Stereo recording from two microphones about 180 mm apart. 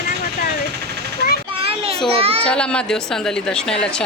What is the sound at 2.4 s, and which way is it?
A woman's voice, 5° left (ahead or behind).